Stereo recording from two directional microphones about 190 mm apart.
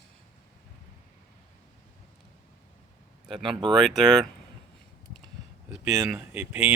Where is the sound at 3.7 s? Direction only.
Centre (ahead or behind).